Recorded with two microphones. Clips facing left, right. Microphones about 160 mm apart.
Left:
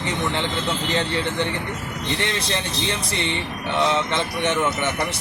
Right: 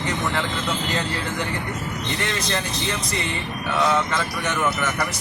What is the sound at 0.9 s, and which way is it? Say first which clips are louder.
Speech: left 3 dB; 30° left (ahead or behind).